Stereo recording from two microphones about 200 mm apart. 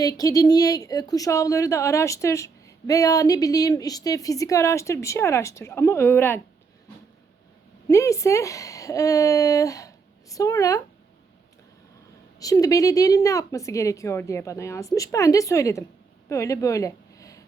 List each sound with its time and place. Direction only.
0.0 s speech: 15° left (ahead or behind)
7.9 s speech: 15° left (ahead or behind)
12.4 s speech: 15° left (ahead or behind)